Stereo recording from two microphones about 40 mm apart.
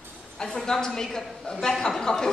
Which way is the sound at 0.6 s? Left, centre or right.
Centre.